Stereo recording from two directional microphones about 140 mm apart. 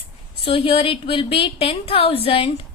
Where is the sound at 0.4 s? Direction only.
40° left (ahead or behind).